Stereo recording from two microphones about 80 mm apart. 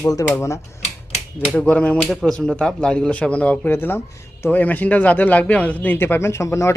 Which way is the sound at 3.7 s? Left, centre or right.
Left.